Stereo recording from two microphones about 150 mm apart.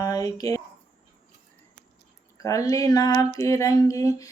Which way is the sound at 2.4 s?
20° left (ahead or behind).